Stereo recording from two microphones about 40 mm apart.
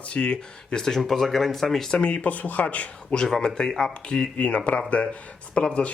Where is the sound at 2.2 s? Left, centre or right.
Left.